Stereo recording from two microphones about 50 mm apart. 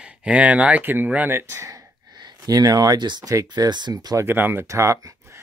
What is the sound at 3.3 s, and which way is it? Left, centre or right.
Speech, right.